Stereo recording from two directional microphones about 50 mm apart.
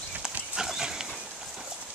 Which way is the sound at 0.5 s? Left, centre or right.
Centre.